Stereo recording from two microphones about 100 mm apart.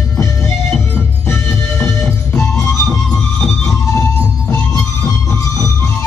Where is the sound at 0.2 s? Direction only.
25° left (ahead or behind).